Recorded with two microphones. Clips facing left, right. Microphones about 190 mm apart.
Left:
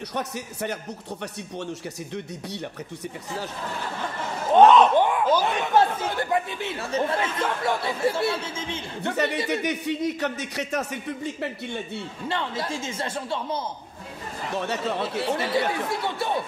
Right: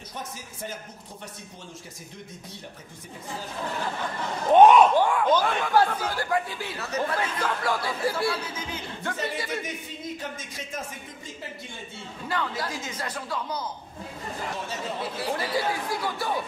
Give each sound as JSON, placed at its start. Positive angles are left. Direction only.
{"t": 0.1, "sound": "speech", "side_deg": 70}
{"t": 4.5, "sound": "speech", "side_deg": -15}
{"t": 4.9, "sound": "a sound", "side_deg": 20}
{"t": 5.4, "sound": "speech", "side_deg": 20}
{"t": 9.1, "sound": "speech", "side_deg": 65}
{"t": 12.3, "sound": "speech", "side_deg": 25}
{"t": 14.6, "sound": "speech", "side_deg": 65}
{"t": 15.2, "sound": "speech", "side_deg": 25}